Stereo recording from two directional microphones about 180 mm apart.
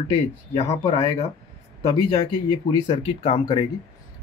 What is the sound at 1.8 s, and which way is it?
Speech, 30° left (ahead or behind).